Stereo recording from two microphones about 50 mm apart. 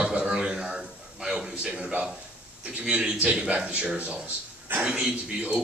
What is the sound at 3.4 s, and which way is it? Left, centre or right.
A man's voice, right.